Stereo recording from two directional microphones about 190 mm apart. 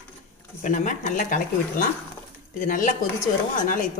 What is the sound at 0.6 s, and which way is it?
Speech, 45° left (ahead or behind).